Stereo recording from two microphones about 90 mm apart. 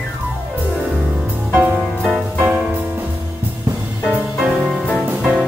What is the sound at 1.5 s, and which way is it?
Music, 25° right (ahead or behind).